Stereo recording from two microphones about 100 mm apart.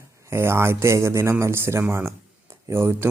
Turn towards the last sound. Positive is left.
turn(degrees=-25)  # may be behind; listen again after turning